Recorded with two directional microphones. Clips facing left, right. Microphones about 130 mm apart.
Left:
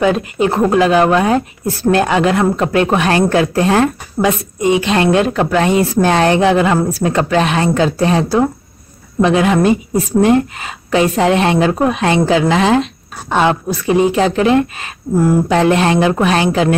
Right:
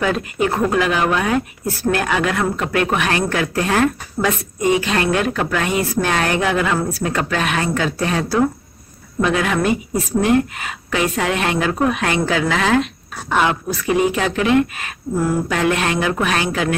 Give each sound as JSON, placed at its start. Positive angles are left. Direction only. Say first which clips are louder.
{"t": 0.0, "sound": "a woman's voice", "louder": "left 5 dB", "side_deg": 25}